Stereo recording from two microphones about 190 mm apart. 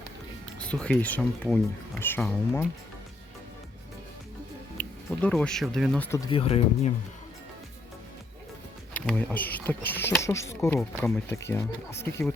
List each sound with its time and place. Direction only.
0.6 s speech: 5° left (ahead or behind)
4.8 s speech: 5° left (ahead or behind)
6.3 s speech: 30° left (ahead or behind)
8.9 s speech: 5° left (ahead or behind)